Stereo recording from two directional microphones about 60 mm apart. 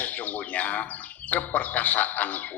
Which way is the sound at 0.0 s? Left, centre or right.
Left.